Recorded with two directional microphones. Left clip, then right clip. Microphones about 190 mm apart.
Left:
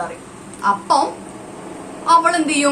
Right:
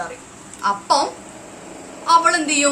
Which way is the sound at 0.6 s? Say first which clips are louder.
Left 2 dB; centre (ahead or behind).